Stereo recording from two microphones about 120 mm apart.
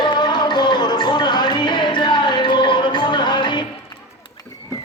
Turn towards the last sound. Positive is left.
turn(degrees=40)  # may be behind; listen again after turning